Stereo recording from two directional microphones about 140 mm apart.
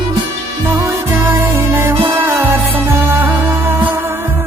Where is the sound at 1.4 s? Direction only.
15° right (ahead or behind).